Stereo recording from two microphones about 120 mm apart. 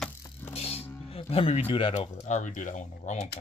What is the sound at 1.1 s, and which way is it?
Speech, 55° left (ahead or behind).